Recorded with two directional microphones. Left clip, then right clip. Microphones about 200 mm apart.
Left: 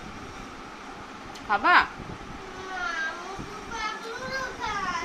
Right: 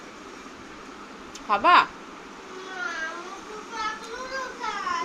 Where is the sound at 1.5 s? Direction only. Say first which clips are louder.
Right 2 dB; 10° right (ahead or behind).